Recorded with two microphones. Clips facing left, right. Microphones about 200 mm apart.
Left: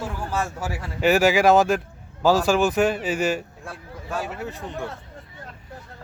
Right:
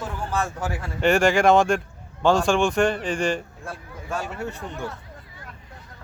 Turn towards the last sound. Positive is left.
turn(degrees=0)  # may be behind; listen again after turning